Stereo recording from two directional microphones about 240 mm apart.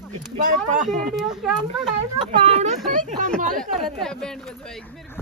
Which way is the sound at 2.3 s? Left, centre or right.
Right.